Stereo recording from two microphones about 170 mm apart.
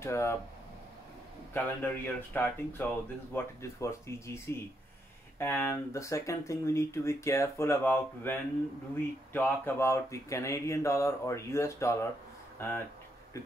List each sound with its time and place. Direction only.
0.0 s speech: 15° left (ahead or behind)
1.5 s speech: 10° left (ahead or behind)
5.4 s speech: 15° left (ahead or behind)